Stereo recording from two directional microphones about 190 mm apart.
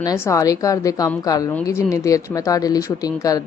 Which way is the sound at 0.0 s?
15° left (ahead or behind).